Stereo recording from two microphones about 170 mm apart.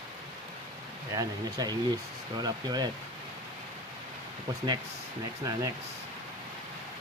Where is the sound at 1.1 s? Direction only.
20° right (ahead or behind).